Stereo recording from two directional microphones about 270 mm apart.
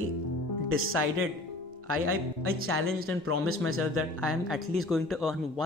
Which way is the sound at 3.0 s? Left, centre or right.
Right.